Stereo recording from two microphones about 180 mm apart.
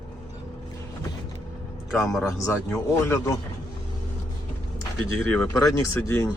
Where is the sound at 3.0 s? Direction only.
15° left (ahead or behind).